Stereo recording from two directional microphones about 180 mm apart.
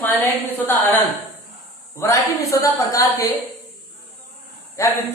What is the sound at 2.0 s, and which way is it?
A woman's voice, 15° left (ahead or behind).